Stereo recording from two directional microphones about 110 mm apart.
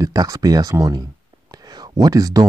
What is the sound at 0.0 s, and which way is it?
Speech, 35° right (ahead or behind).